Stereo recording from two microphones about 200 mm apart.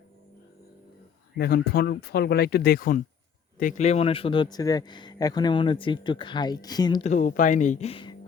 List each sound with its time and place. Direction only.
1.4 s speech: 50° left (ahead or behind); by 7.0 s 20° left (ahead or behind)
7.0 s speech: 40° left (ahead or behind)